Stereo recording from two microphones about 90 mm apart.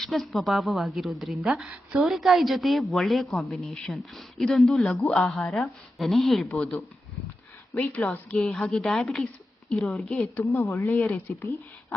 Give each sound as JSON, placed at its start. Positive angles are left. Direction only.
{"t": 0.0, "sound": "a woman's voice", "side_deg": 0}
{"t": 6.5, "sound": "a woman's voice", "side_deg": 15}